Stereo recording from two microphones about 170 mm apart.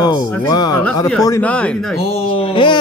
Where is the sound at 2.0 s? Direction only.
35° left (ahead or behind).